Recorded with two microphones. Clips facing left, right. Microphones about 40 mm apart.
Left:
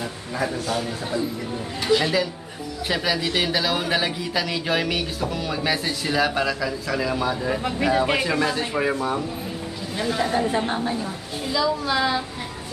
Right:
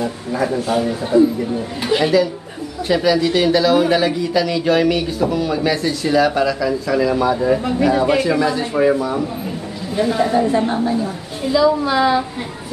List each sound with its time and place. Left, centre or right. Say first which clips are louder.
0.0 s a man's voice: right 7 dB; centre
2.9 s a man's voice: right 8 dB; centre
7.8 s a man's voice: right 4 dB; centre
9.9 s speech: right 7 dB; centre
10.6 s a man's voice: right 6 dB; centre
11.4 s speech: right 8 dB; centre